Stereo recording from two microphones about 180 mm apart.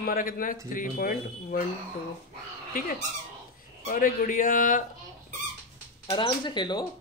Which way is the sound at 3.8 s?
50° left (ahead or behind).